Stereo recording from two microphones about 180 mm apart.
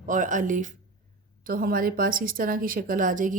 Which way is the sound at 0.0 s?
45° right (ahead or behind).